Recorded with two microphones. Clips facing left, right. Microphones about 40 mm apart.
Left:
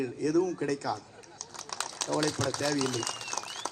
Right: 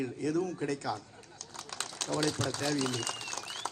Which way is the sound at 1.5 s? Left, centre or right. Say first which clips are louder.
Left 3 dB; right.